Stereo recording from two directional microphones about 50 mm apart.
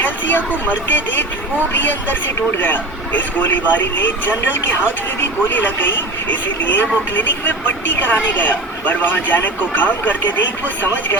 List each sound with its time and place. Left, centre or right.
0.0 s speech: left
5.5 s speech: left